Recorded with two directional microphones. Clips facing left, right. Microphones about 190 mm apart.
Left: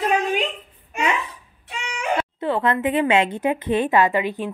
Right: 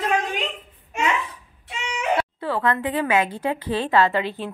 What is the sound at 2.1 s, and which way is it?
A woman's voice, 20° left (ahead or behind).